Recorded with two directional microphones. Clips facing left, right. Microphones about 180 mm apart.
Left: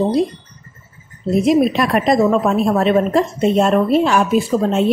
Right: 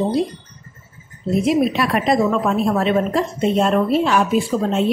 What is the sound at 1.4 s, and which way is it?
A woman's voice, 40° left (ahead or behind).